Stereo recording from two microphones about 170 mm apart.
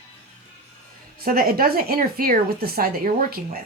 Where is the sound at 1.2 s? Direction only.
60° right (ahead or behind).